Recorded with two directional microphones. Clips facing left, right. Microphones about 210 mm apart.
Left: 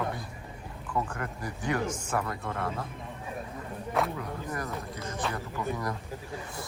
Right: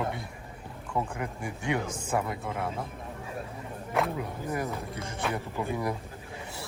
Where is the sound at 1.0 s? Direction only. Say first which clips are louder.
Right 1 dB; 10° right (ahead or behind).